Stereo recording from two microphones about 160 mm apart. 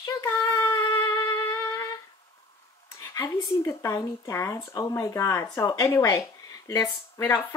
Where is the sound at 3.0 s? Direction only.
20° left (ahead or behind).